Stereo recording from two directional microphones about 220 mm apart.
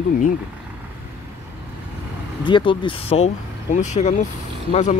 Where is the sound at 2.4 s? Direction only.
20° left (ahead or behind).